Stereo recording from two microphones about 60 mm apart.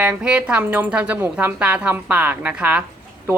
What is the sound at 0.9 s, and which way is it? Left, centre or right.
Speech, right.